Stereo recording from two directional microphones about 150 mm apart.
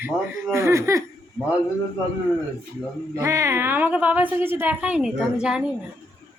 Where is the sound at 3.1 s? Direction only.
20° right (ahead or behind).